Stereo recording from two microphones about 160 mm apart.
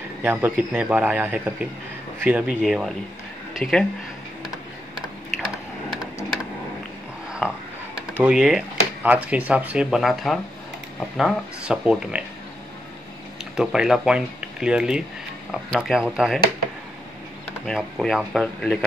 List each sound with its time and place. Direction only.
0.2 s a man's voice: 10° right (ahead or behind); by 3.8 s 5° left (ahead or behind)
4.9 s typing: 30° right (ahead or behind)
7.2 s a sound: 5° right (ahead or behind)
8.2 s speech: 5° right (ahead or behind)
13.4 s speech: 5° right (ahead or behind)
17.6 s speech: centre (ahead or behind)